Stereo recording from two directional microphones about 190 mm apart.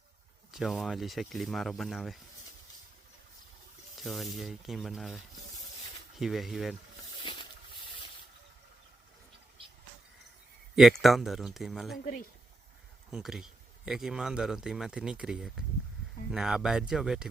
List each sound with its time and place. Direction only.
0.5 s a man's voice: centre (ahead or behind)
4.0 s a man's voice: centre (ahead or behind)
7.2 s a sound: 25° left (ahead or behind)
10.8 s a man's voice: centre (ahead or behind)
13.1 s a man's voice: 5° right (ahead or behind)